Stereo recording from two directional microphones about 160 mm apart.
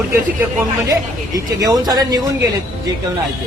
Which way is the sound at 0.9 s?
25° right (ahead or behind).